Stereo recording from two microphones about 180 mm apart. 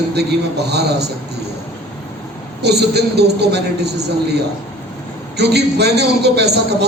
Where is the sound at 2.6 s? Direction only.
65° right (ahead or behind).